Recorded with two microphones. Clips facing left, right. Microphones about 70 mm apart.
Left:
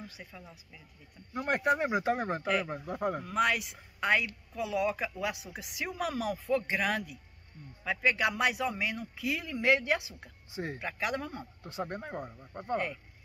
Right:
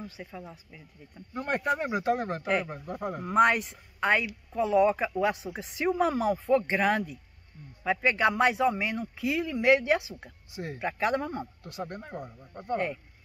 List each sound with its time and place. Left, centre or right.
0.0 s speech: right
1.3 s speech: centre
3.3 s speech: right
10.5 s speech: left
10.8 s speech: right
11.6 s speech: left
12.7 s speech: centre